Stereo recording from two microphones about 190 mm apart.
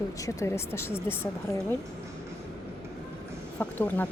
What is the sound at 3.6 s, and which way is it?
Speech, 10° left (ahead or behind).